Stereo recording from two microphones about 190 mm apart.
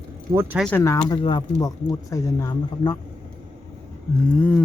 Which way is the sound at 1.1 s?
25° left (ahead or behind).